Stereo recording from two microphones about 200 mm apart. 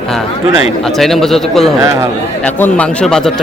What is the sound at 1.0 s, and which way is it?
Speech, centre (ahead or behind).